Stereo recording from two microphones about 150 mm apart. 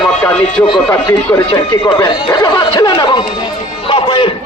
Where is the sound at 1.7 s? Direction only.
30° left (ahead or behind).